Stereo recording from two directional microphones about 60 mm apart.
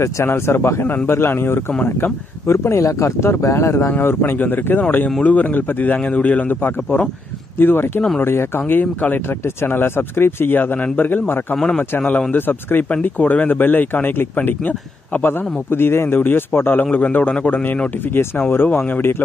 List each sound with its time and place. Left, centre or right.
0.0 s speech: left
0.8 s speech: left
2.4 s speech: left
4.3 s a man's voice: left
18.2 s speech: left